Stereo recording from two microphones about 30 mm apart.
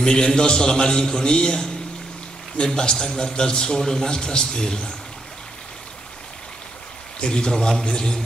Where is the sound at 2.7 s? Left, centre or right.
Centre.